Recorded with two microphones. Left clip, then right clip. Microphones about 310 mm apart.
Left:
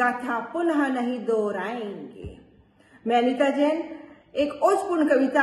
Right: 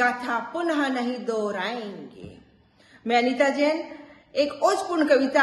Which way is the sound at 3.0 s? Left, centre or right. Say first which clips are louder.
Even; right.